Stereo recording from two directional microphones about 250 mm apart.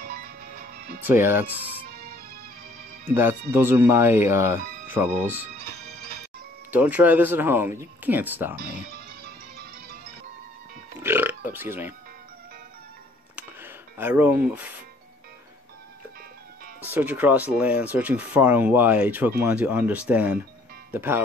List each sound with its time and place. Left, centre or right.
0.0 s music: right
1.0 s speech: centre
3.2 s speech: centre
6.7 s speech: centre
11.0 s burping: centre
13.4 s a sound: centre
16.9 s speech: centre